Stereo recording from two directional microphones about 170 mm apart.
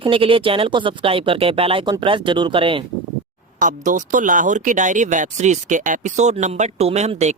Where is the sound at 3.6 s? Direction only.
50° right (ahead or behind).